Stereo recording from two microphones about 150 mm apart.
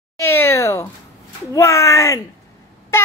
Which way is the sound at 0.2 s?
15° left (ahead or behind).